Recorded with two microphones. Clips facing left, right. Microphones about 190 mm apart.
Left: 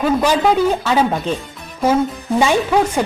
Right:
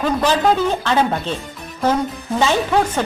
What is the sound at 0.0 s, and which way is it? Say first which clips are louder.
A woman's voice: left 2 dB; 10° left (ahead or behind).